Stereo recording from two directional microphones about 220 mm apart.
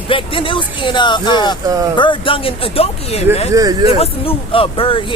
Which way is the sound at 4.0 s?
25° left (ahead or behind).